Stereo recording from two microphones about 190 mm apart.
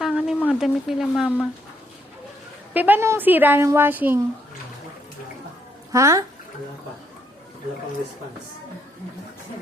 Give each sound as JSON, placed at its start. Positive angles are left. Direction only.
{"t": 0.0, "sound": "a sound", "side_deg": -5}
{"t": 0.6, "sound": "speech", "side_deg": 0}
{"t": 2.7, "sound": "a woman's voice", "side_deg": -10}
{"t": 5.9, "sound": "a woman's voice", "side_deg": -15}